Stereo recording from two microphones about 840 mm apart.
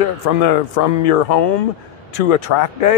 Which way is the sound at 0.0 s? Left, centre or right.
Left.